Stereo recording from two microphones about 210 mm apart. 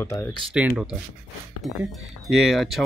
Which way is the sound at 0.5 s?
5° right (ahead or behind).